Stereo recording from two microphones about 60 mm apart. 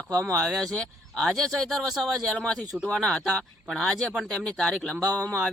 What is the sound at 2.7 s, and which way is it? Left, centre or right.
Speech, centre.